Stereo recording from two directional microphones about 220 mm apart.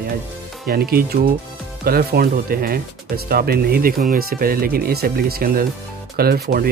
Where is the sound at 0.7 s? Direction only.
40° right (ahead or behind).